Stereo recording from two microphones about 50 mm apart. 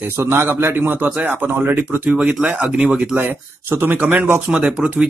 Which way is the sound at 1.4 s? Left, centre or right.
Right.